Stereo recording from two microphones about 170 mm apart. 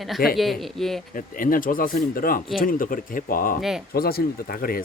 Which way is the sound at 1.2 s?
55° left (ahead or behind).